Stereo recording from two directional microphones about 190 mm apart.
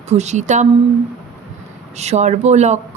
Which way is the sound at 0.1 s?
35° right (ahead or behind).